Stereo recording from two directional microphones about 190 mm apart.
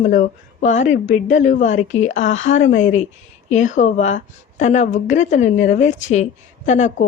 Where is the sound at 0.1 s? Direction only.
40° left (ahead or behind).